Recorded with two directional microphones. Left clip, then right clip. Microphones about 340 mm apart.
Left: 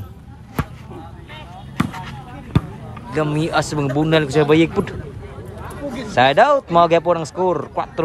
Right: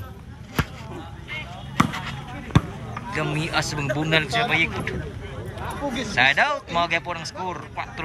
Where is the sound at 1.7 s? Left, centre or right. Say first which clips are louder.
Right 2 dB; centre.